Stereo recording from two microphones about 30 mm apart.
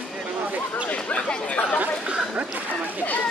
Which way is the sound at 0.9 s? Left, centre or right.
Left.